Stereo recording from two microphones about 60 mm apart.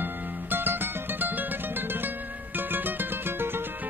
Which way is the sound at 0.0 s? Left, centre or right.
Right.